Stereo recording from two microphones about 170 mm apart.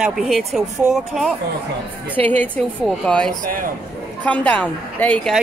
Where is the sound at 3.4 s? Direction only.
55° right (ahead or behind).